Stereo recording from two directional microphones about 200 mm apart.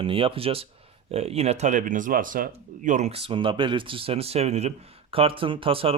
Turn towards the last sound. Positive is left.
turn(degrees=-25)  # may be behind; listen again after turning